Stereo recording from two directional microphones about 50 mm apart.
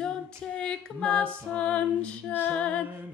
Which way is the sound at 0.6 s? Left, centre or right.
Centre.